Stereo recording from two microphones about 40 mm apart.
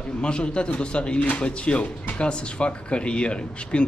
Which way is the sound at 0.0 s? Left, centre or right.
Left.